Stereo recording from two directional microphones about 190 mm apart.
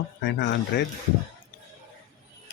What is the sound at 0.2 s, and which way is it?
Speech, 70° left (ahead or behind).